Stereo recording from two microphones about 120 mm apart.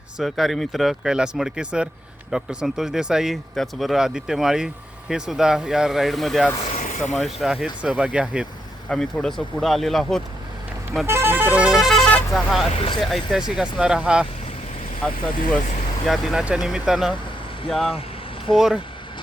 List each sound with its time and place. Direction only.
0.2 s speech: centre (ahead or behind)
6.7 s vehicle: 90° left
7.1 s speech: centre (ahead or behind)
8.9 s speech: 5° left (ahead or behind)
11.0 s vehicle: 20° right (ahead or behind); by 12.6 s centre (ahead or behind)
12.7 s speech: 50° left (ahead or behind)
13.0 s speech: centre (ahead or behind)
16.0 s speech: centre (ahead or behind)